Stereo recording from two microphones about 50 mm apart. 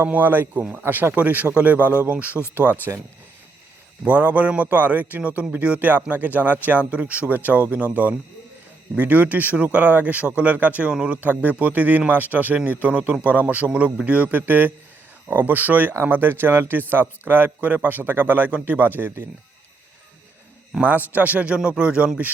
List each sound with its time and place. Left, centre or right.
0.0 s a man's voice: right
4.0 s a man's voice: right
10.8 s a man's voice: centre
11.2 s speech: right
13.1 s a man's voice: centre
13.7 s a man's voice: right
20.8 s a man's voice: right